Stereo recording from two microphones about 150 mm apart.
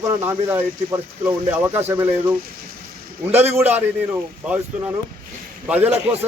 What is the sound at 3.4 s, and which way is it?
A man's voice, 15° right (ahead or behind).